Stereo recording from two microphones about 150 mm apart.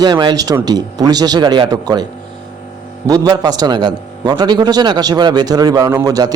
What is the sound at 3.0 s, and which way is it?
A man's voice, 25° right (ahead or behind).